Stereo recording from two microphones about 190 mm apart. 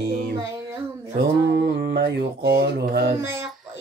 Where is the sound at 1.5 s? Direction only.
55° right (ahead or behind).